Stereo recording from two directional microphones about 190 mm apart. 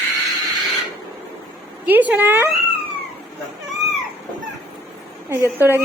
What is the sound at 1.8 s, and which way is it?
Speech, 10° right (ahead or behind).